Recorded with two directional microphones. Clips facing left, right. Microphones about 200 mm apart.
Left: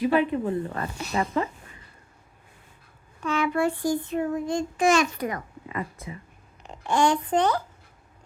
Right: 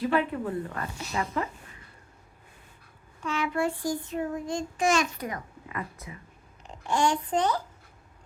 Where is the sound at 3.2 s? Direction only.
60° left (ahead or behind).